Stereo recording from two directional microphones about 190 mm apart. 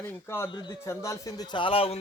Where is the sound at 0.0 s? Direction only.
15° left (ahead or behind).